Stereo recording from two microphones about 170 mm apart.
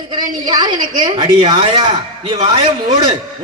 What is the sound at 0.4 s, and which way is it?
A woman's voice, 25° right (ahead or behind).